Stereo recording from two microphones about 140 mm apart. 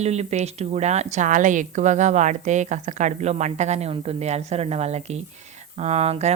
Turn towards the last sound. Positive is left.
turn(degrees=-50)  # may be behind; listen again after turning